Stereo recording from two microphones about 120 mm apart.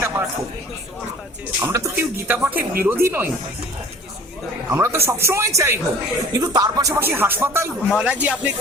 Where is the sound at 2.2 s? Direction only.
15° right (ahead or behind).